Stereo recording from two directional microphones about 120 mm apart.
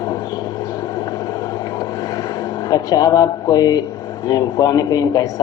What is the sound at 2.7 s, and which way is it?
A man's voice, 30° left (ahead or behind).